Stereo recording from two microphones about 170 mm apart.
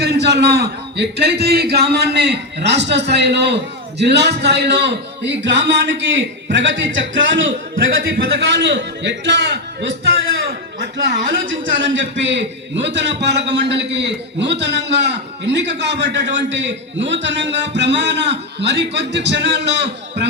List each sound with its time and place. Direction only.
0.0 s a man's voice: 75° right (ahead or behind)
8.1 s a man's voice: 75° right (ahead or behind); by 9.6 s 90° right
10.8 s a man's voice: 90° right